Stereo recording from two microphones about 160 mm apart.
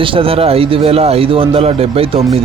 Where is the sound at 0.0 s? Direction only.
35° right (ahead or behind).